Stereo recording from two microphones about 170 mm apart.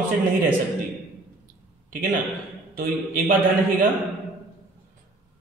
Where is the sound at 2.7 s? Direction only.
60° right (ahead or behind).